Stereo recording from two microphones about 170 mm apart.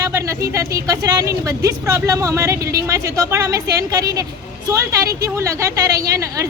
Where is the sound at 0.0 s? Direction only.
20° right (ahead or behind).